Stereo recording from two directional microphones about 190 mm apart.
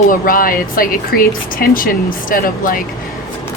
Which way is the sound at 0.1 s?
45° left (ahead or behind).